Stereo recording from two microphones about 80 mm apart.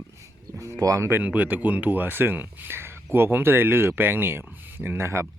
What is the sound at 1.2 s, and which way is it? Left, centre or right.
Speech, centre.